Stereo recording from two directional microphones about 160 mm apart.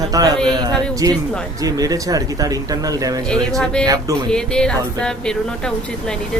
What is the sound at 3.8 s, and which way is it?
Speech, 20° right (ahead or behind).